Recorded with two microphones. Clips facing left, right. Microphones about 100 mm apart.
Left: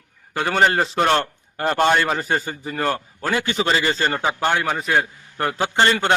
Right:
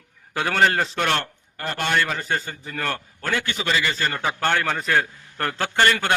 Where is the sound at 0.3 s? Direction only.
15° left (ahead or behind).